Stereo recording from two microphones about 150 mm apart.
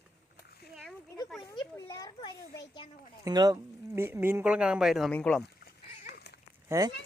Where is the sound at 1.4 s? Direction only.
30° left (ahead or behind).